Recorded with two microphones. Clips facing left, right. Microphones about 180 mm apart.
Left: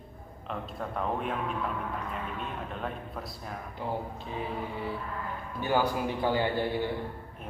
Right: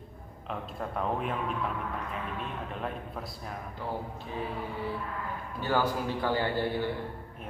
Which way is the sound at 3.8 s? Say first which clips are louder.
Left 2 dB; 20° left (ahead or behind).